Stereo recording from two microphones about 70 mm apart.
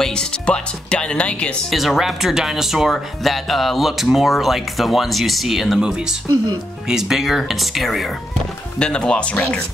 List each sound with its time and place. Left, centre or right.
0.0 s speech: centre
1.7 s speech: centre
6.2 s speech: right
6.9 s speech: centre
8.7 s speech: centre